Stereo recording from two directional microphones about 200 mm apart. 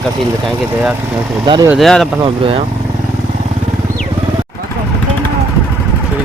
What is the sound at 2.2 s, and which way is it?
Speech, 30° right (ahead or behind).